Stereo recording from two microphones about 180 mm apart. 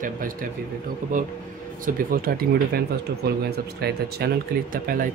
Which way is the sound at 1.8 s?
50° right (ahead or behind).